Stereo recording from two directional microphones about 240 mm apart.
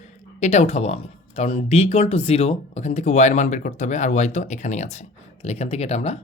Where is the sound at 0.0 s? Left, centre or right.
Left.